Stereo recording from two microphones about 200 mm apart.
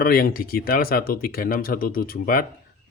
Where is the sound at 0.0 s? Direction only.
45° left (ahead or behind).